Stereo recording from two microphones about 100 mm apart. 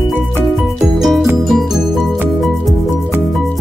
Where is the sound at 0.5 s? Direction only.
Centre (ahead or behind).